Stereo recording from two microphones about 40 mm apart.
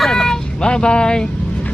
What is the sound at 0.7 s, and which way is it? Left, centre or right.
Speech, left.